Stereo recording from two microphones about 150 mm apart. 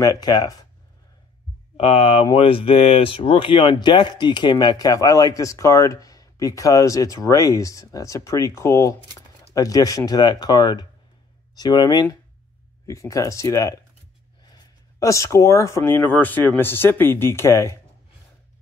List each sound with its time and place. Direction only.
0.0 s speech: 25° left (ahead or behind)
1.8 s speech: 40° left (ahead or behind); by 17.7 s 20° left (ahead or behind)